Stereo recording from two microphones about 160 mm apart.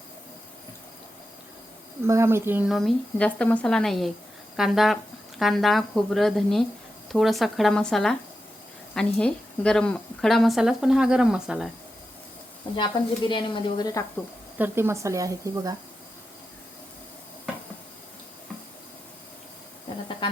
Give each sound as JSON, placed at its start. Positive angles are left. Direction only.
{"t": 2.0, "sound": "speech", "side_deg": -15}
{"t": 2.7, "sound": "speech", "side_deg": 5}
{"t": 12.7, "sound": "speech", "side_deg": 30}
{"t": 14.6, "sound": "speech", "side_deg": -15}
{"t": 20.1, "sound": "a sound", "side_deg": 30}